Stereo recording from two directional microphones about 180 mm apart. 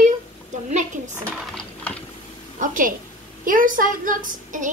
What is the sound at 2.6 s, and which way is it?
A woman's voice, 50° right (ahead or behind).